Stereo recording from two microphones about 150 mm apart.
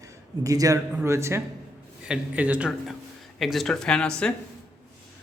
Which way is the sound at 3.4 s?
Centre (ahead or behind).